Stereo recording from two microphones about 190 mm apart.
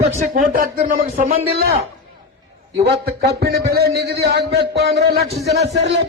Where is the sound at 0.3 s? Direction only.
45° right (ahead or behind).